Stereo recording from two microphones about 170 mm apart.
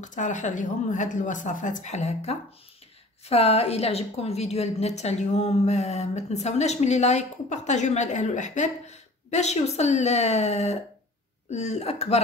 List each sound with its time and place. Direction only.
0.0 s a woman's voice: 45° left (ahead or behind)